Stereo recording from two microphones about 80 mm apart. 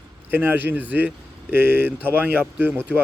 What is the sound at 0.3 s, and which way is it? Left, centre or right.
Speech, right.